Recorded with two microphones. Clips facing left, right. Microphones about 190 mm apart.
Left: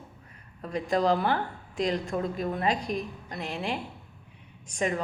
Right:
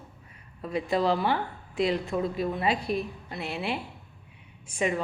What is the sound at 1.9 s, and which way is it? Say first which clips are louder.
Speech: right 1 dB; 5° right (ahead or behind).